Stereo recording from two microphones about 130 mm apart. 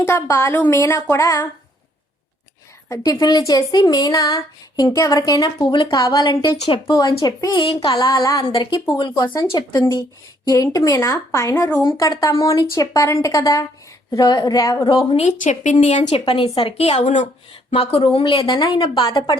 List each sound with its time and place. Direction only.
0.0 s a woman's voice: 20° left (ahead or behind)
2.9 s a woman's voice: 30° left (ahead or behind)
7.6 s a woman's voice: 45° left (ahead or behind)
7.9 s a woman's voice: 30° left (ahead or behind)
15.1 s speech: 65° left (ahead or behind)
16.2 s a woman's voice: 45° left (ahead or behind); by 17.2 s 65° left (ahead or behind)
17.7 s speech: 50° left (ahead or behind)